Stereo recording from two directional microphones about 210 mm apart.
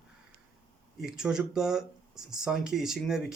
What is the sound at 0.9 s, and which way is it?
Speech, 5° right (ahead or behind).